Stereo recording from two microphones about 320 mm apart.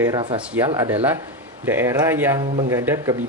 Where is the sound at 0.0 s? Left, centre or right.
Centre.